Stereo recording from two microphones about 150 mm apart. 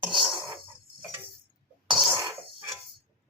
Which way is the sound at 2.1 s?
25° right (ahead or behind).